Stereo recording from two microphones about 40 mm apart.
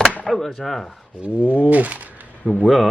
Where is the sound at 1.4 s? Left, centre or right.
Right.